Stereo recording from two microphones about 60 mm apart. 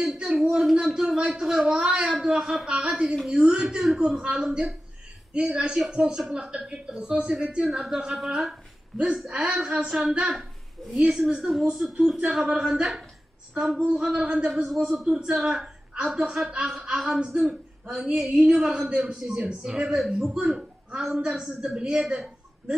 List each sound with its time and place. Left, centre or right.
0.0 s a sound: centre
0.3 s a woman's voice: centre
14.5 s a woman's voice: centre
15.0 s a woman's voice: centre
21.5 s a woman's voice: centre